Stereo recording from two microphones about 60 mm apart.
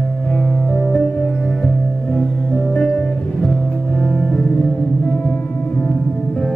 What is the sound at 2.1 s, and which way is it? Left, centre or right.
Music, centre.